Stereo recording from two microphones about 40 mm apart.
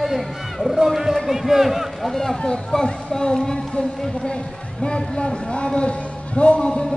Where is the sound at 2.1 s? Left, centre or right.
Centre; by 6.7 s left.